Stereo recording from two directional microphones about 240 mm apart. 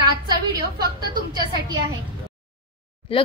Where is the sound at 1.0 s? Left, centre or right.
Centre.